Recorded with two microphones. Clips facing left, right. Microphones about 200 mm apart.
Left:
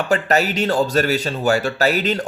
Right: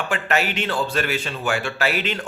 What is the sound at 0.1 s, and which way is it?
A man's voice, 40° left (ahead or behind).